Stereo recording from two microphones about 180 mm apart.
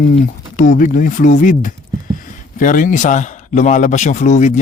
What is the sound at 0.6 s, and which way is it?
A man's voice, 50° left (ahead or behind).